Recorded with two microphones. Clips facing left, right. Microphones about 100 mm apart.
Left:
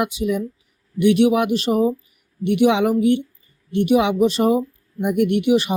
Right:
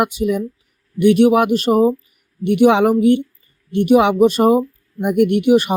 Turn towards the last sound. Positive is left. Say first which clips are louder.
# right 4 dB
turn(degrees=-50)  # may be behind; listen again after turning